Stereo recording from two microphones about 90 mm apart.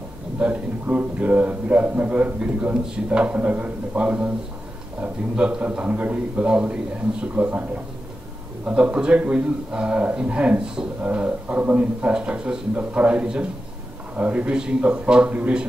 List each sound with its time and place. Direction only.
0.4 s a man's voice: 15° right (ahead or behind)